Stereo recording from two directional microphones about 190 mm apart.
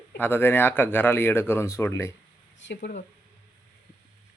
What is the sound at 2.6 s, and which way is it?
Speech, 70° left (ahead or behind).